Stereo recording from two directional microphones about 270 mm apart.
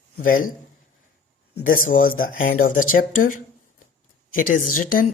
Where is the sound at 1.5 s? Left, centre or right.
Left.